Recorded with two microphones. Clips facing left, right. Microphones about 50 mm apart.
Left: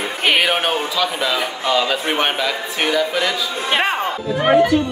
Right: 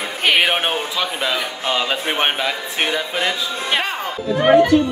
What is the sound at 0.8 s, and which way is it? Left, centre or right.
Speech, right.